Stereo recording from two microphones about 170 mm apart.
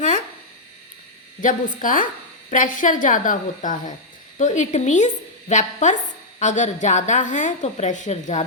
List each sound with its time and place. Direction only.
1.4 s a woman's voice: 50° left (ahead or behind)